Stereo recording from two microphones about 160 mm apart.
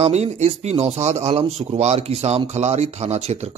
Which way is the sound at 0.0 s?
40° right (ahead or behind).